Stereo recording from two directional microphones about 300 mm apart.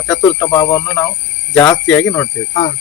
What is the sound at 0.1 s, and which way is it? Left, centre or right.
Speech, centre.